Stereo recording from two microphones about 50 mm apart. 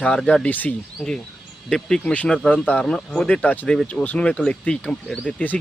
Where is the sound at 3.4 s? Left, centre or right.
Left.